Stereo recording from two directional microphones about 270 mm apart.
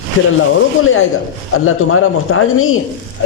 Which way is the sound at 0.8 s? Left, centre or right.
Left.